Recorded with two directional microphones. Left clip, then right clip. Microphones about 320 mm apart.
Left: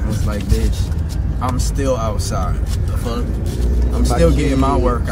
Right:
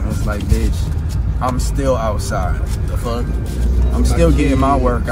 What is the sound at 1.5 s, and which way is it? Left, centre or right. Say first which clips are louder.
Speech: even; centre.